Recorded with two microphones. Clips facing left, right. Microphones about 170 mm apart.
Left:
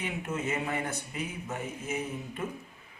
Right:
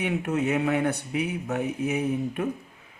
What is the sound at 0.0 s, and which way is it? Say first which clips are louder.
Speech: right 8 dB; 65° right (ahead or behind).